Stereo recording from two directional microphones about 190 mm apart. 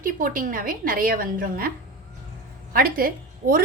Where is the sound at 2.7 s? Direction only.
50° right (ahead or behind).